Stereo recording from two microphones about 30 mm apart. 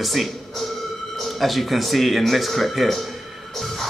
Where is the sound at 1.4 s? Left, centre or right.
Centre.